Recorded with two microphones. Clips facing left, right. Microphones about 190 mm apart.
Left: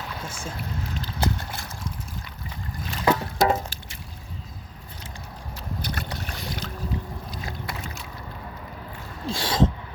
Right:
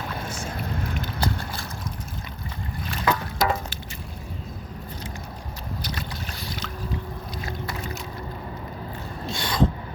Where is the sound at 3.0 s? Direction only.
30° left (ahead or behind).